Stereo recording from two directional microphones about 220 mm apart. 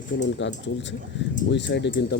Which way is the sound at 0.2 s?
55° left (ahead or behind).